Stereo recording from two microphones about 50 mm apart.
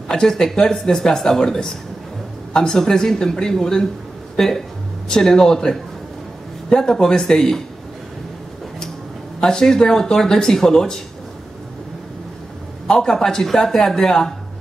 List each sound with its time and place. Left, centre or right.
0.1 s speech: centre
9.4 s speech: centre
12.8 s speech: centre